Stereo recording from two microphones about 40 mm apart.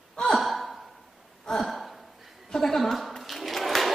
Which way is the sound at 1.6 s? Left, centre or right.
Centre.